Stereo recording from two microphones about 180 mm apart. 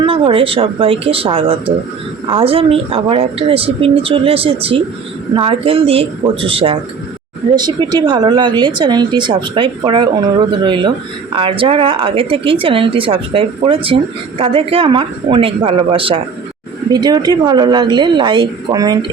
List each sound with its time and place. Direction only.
0.0 s speech: 30° right (ahead or behind)